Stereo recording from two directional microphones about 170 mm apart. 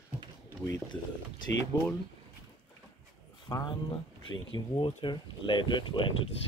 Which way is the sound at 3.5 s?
25° left (ahead or behind).